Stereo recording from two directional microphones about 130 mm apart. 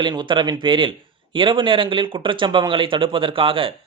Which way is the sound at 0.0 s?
35° right (ahead or behind).